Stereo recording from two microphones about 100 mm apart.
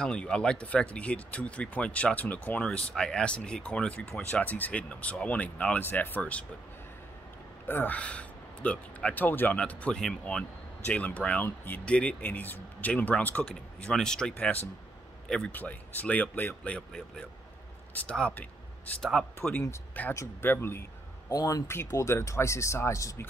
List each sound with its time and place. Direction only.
0.0 s speech: 10° left (ahead or behind)
7.6 s speech: 20° left (ahead or behind)
15.5 s speech: 15° left (ahead or behind)
21.3 s speech: 40° left (ahead or behind)
21.6 s speech: 25° left (ahead or behind)